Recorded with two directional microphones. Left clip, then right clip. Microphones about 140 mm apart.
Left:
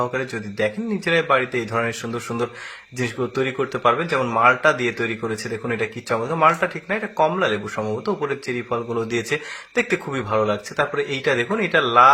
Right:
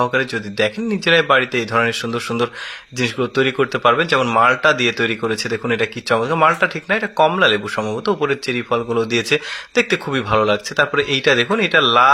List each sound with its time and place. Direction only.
0.0 s speech: 25° right (ahead or behind)